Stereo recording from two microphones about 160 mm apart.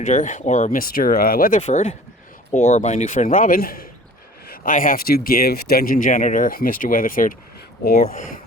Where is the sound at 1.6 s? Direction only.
45° left (ahead or behind).